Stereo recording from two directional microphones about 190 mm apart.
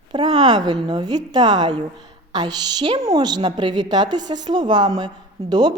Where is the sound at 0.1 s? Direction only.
25° right (ahead or behind).